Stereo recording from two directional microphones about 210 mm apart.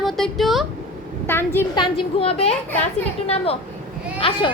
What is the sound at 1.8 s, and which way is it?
A child's voice, 30° left (ahead or behind).